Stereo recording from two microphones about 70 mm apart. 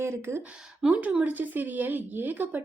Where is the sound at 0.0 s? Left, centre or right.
Right.